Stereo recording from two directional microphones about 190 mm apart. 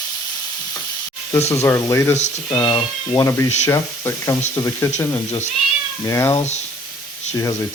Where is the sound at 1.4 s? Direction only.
35° left (ahead or behind).